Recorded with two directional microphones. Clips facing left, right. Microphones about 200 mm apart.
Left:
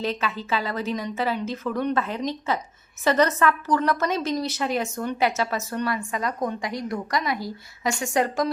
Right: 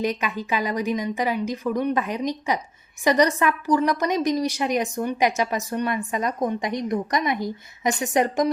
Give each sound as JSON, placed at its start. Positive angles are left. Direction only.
{"t": 0.0, "sound": "a woman's voice", "side_deg": -15}